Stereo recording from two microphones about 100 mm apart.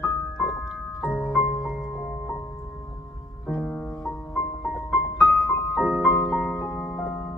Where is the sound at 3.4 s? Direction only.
5° left (ahead or behind).